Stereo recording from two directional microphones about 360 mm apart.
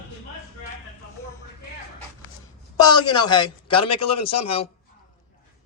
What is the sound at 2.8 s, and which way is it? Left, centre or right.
Speech, centre.